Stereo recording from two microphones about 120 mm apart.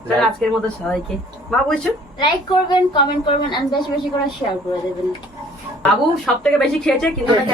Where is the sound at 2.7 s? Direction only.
40° left (ahead or behind).